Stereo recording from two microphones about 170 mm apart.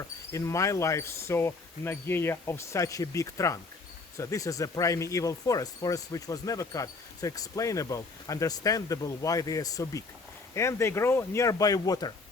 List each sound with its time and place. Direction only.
0.3 s speech: 20° left (ahead or behind)